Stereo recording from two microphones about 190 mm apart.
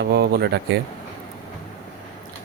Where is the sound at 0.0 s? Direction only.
60° right (ahead or behind).